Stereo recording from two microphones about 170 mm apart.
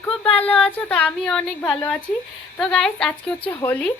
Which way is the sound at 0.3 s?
10° left (ahead or behind).